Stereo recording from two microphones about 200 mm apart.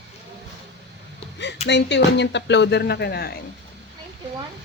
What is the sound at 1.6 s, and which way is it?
Speech, 60° left (ahead or behind).